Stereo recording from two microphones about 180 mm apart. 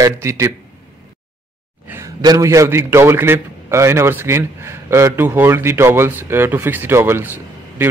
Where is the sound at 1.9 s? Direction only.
15° right (ahead or behind).